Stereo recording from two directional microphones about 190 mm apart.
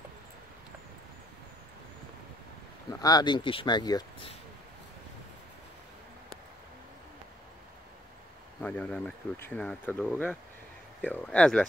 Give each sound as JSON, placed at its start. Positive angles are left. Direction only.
{"t": 2.9, "sound": "speech", "side_deg": 20}
{"t": 8.5, "sound": "speech", "side_deg": 5}